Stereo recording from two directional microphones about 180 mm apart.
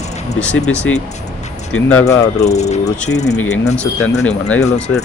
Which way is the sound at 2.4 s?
40° left (ahead or behind).